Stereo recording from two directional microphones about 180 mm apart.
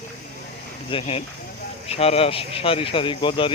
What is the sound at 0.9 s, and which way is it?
Speech, 35° left (ahead or behind).